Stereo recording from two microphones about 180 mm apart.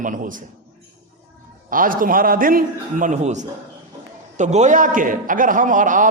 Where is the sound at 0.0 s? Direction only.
45° right (ahead or behind).